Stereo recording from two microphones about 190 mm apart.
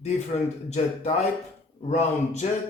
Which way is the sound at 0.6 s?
35° left (ahead or behind).